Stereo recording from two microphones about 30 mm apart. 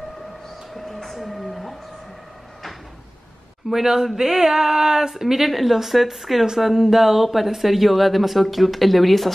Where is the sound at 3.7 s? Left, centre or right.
Centre.